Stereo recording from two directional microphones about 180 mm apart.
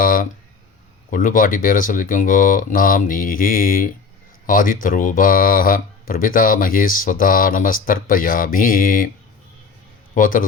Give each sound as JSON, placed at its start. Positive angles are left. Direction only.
{"t": 0.0, "sound": "a sound", "side_deg": 50}
{"t": 1.1, "sound": "speech", "side_deg": 50}
{"t": 10.2, "sound": "speech", "side_deg": 50}